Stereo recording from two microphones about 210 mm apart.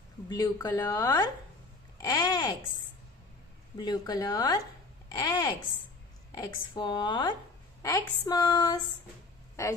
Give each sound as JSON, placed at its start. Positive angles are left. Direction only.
{"t": 0.3, "sound": "speech", "side_deg": 20}
{"t": 3.7, "sound": "speech", "side_deg": 20}